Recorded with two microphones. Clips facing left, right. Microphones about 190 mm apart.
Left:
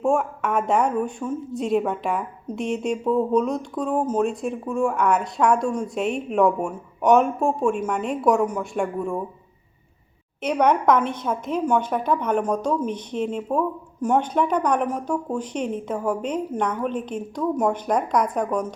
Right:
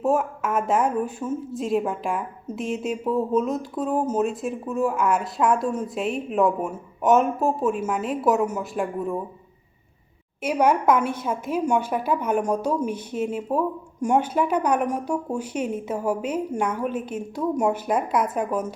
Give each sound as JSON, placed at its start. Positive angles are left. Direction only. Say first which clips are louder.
{"t": 0.0, "sound": "speech", "louder": "left 1 dB", "side_deg": -5}
{"t": 10.4, "sound": "a woman's voice", "louder": "left 1 dB", "side_deg": -5}